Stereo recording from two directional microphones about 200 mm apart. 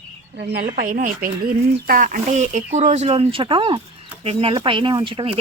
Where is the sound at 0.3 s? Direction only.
55° right (ahead or behind).